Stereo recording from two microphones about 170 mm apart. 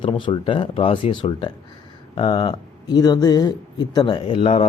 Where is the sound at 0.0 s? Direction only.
30° left (ahead or behind).